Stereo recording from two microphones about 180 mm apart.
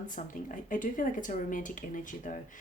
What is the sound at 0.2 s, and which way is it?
Speech, 45° left (ahead or behind).